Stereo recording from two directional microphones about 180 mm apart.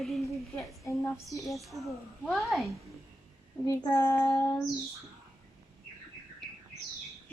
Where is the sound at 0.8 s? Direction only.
15° left (ahead or behind).